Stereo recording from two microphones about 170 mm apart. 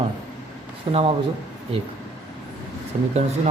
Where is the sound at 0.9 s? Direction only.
25° right (ahead or behind).